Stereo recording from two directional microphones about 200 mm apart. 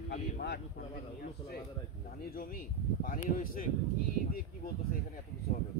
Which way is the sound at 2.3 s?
45° left (ahead or behind).